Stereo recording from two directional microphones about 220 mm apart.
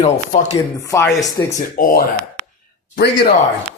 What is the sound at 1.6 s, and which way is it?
Speech, 40° left (ahead or behind).